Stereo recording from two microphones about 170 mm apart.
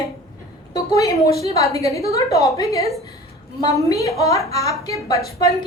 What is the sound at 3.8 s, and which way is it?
A woman's voice, 20° left (ahead or behind).